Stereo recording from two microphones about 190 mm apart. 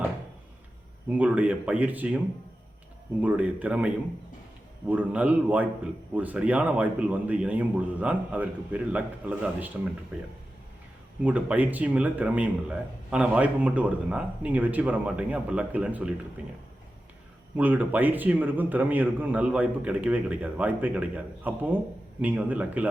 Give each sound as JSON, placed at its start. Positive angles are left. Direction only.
{"t": 1.1, "sound": "a man's voice", "side_deg": -5}
{"t": 11.2, "sound": "a man's voice", "side_deg": -5}
{"t": 17.6, "sound": "a man's voice", "side_deg": -10}